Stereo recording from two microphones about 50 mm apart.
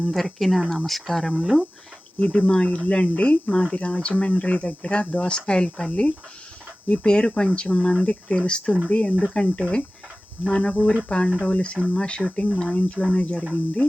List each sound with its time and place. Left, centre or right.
0.0 s speech: centre
2.1 s speech: centre